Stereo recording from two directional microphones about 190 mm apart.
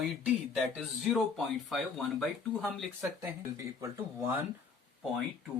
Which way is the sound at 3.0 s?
15° right (ahead or behind).